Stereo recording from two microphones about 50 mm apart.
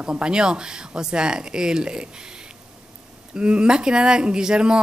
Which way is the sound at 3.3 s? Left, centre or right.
Centre.